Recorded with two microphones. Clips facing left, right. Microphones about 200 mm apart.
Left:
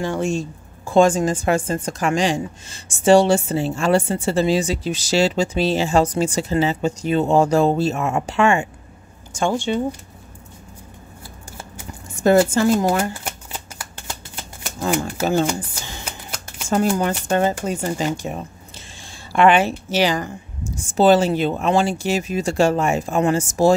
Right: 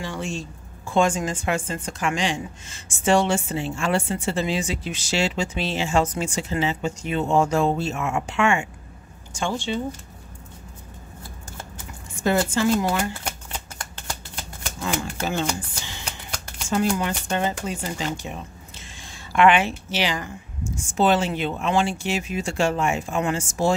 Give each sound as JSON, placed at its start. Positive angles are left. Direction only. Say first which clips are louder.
{"t": 0.0, "sound": "a woman's voice", "louder": "left 8 dB", "side_deg": 45}
{"t": 9.4, "sound": "speech", "louder": "left 6 dB", "side_deg": 50}
{"t": 12.2, "sound": "a woman's voice", "louder": "left 7 dB", "side_deg": 40}
{"t": 13.2, "sound": "shuffling cards", "louder": "left 1 dB", "side_deg": 5}
{"t": 14.8, "sound": "speech", "louder": "left 6 dB", "side_deg": 40}
{"t": 16.1, "sound": "shuffling cards", "louder": "left 2 dB", "side_deg": 5}
{"t": 16.9, "sound": "a woman's voice", "louder": "left 5 dB", "side_deg": 45}